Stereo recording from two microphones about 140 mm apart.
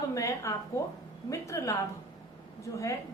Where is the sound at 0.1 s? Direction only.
20° left (ahead or behind).